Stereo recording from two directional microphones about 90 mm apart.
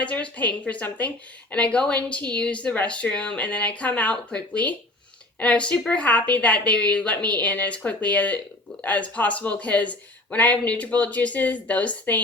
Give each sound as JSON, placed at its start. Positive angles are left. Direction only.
{"t": 0.0, "sound": "speech", "side_deg": 15}